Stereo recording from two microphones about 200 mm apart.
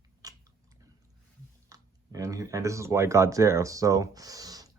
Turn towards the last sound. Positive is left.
turn(degrees=-20)  # may be behind; listen again after turning